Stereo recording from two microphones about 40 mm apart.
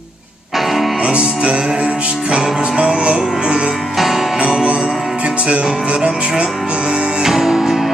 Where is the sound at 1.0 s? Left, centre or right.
Right.